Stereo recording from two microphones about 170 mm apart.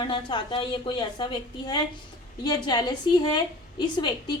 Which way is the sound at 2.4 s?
25° left (ahead or behind).